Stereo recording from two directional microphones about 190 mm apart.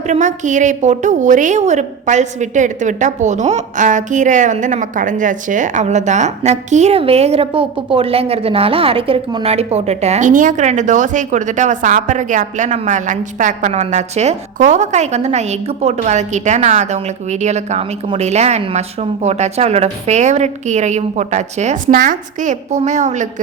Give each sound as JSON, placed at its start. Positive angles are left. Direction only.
{"t": 0.1, "sound": "a woman's voice", "side_deg": -40}